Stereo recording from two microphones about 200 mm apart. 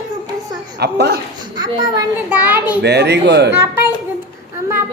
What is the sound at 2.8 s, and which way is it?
Speech, 55° right (ahead or behind).